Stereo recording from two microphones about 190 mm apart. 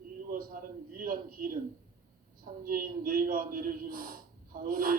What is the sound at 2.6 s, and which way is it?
A man's voice, 50° right (ahead or behind).